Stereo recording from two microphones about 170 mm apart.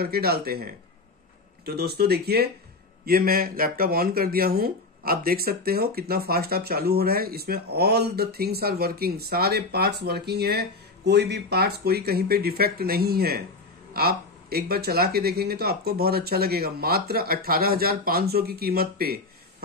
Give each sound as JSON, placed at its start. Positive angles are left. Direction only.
{"t": 0.0, "sound": "speech", "side_deg": -65}